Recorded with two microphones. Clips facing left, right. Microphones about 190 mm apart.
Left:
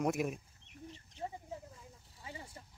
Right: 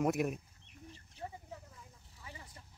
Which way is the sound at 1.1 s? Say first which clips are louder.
Left 3 dB; 25° left (ahead or behind).